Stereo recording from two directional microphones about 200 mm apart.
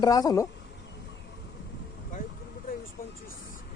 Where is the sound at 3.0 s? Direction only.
45° left (ahead or behind).